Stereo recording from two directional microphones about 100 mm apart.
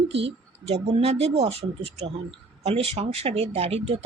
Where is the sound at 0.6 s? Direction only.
90° right.